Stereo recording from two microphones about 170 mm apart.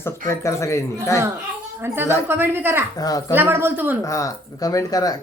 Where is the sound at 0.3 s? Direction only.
15° left (ahead or behind).